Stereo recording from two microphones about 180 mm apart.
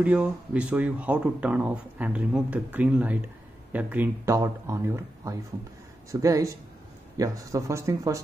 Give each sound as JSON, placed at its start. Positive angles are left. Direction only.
{"t": 0.0, "sound": "speech", "side_deg": -5}